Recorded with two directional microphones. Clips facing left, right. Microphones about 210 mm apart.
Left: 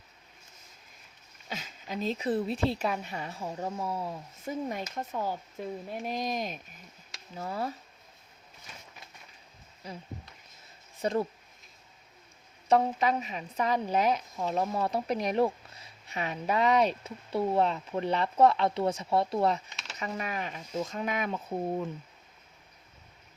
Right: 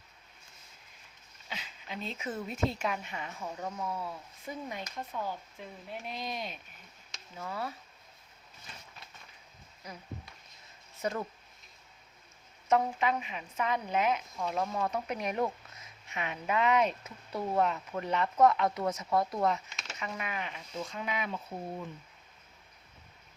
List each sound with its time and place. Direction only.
1.5 s a woman's voice: 40° left (ahead or behind)
9.8 s speech: 30° left (ahead or behind)
11.0 s a woman's voice: 30° left (ahead or behind)
12.6 s a woman's voice: 35° left (ahead or behind)